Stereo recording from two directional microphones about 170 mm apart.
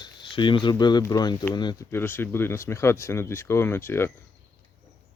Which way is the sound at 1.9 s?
15° left (ahead or behind).